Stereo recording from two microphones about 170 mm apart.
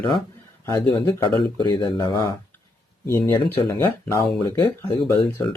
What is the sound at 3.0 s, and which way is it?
Speech, 15° left (ahead or behind).